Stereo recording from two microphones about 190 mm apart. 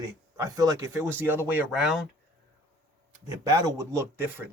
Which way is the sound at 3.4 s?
20° right (ahead or behind).